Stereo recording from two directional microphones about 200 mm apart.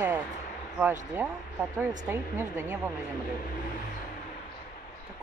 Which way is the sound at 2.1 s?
10° right (ahead or behind).